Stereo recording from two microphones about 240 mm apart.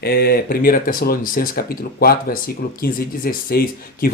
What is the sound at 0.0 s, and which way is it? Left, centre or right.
Speech, left.